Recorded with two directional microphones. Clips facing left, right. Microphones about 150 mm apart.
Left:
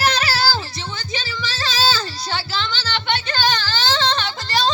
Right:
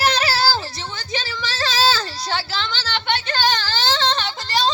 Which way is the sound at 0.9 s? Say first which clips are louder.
Right 1 dB; 65° right (ahead or behind).